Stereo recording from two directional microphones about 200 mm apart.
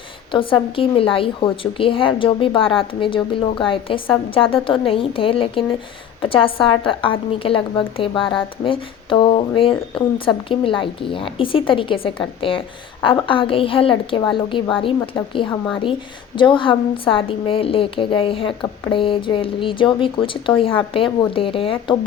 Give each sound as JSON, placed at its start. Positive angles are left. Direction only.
{"t": 0.3, "sound": "speech", "side_deg": 25}